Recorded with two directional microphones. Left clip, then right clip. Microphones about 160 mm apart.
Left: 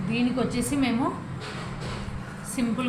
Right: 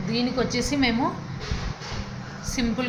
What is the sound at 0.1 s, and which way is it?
Speech, 20° right (ahead or behind).